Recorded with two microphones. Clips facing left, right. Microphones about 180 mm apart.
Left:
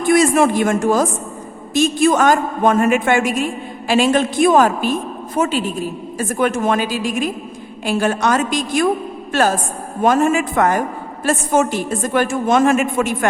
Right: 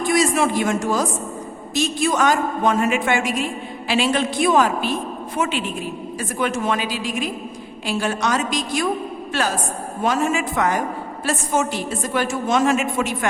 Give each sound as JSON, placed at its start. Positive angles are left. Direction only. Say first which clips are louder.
{"t": 0.1, "sound": "a man's voice", "louder": "left 6 dB", "side_deg": 55}